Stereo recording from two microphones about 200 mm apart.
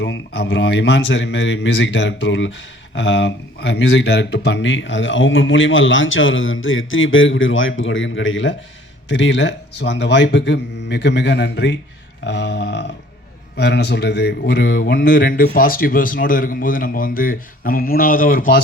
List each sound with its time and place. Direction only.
0.0 s speech: 60° left (ahead or behind)
15.0 s speech: 45° left (ahead or behind)